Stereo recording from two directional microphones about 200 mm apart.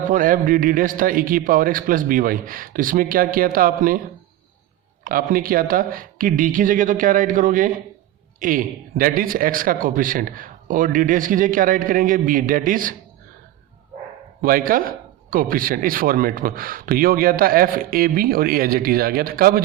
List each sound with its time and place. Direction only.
0.1 s speech: 40° right (ahead or behind)
5.0 s speech: 45° right (ahead or behind)
14.4 s speech: 45° right (ahead or behind)